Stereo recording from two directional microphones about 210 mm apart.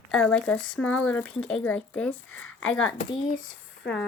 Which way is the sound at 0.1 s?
5° left (ahead or behind).